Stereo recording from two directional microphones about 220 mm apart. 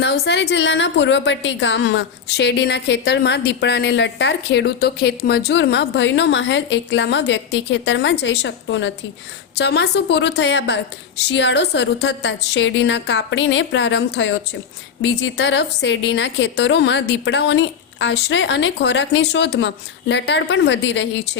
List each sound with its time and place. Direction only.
0.0 s a woman's voice: 50° left (ahead or behind)